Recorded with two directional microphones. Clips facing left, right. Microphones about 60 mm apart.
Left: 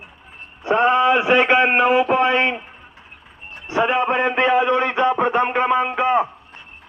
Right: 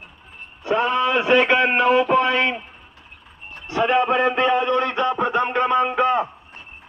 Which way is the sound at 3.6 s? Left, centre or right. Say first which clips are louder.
Even; centre.